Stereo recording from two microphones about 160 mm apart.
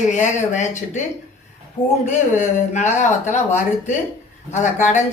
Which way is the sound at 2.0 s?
50° left (ahead or behind).